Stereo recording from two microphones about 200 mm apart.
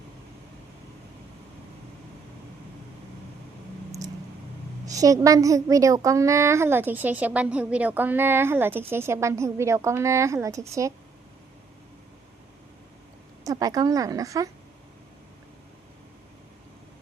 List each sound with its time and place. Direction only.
4.9 s a woman's voice: 15° right (ahead or behind)
13.4 s a woman's voice: 20° right (ahead or behind)